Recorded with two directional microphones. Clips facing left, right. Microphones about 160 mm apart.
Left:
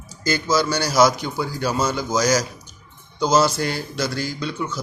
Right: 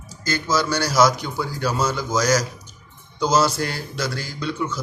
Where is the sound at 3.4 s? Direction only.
Centre (ahead or behind).